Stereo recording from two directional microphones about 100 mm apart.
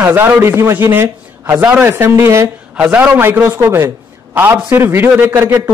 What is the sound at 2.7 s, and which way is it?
A man's voice, 15° right (ahead or behind).